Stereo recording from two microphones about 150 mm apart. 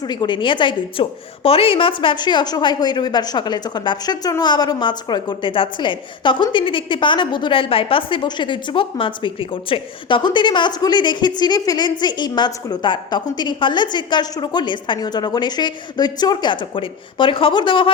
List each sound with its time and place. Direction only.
0.0 s a woman's voice: 30° left (ahead or behind)